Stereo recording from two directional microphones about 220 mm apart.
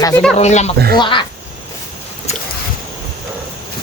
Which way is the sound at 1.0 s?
20° left (ahead or behind).